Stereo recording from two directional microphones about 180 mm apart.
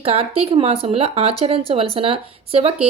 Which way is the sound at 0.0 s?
35° right (ahead or behind).